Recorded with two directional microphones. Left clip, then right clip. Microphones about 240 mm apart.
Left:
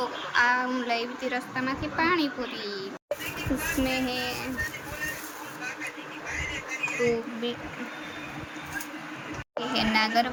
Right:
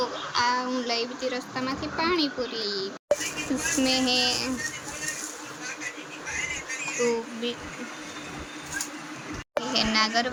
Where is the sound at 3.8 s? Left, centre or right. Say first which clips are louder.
Right 9 dB; centre.